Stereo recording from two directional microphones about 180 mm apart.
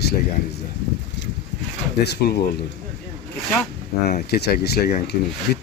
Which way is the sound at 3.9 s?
60° left (ahead or behind).